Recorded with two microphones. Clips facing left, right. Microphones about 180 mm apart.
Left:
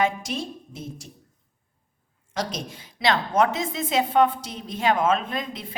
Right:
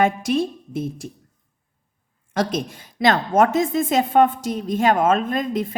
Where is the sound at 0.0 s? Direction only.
55° right (ahead or behind).